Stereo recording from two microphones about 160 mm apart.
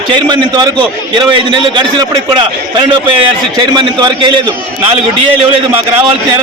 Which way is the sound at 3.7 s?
30° right (ahead or behind).